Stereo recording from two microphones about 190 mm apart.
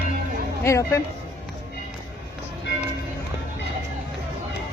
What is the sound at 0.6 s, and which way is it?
Speech, 15° left (ahead or behind).